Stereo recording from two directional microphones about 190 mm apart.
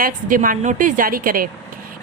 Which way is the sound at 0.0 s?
45° right (ahead or behind).